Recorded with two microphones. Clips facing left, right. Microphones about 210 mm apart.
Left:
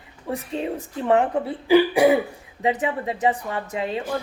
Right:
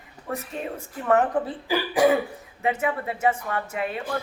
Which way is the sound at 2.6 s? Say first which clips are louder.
Left 2 dB; 15° left (ahead or behind).